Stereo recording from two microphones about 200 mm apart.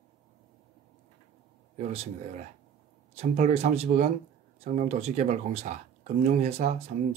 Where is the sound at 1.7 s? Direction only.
35° right (ahead or behind).